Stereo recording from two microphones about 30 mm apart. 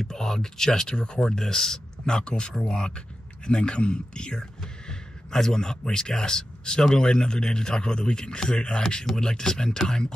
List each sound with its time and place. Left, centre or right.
0.0 s speech: centre
2.0 s speech: left
9.0 s speech: centre